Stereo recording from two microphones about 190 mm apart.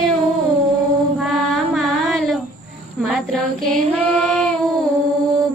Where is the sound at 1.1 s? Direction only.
Centre (ahead or behind).